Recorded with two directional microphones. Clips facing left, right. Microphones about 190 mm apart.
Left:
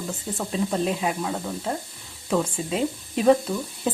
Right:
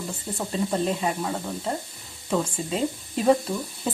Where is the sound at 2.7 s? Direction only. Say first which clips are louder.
Left 1 dB; centre (ahead or behind).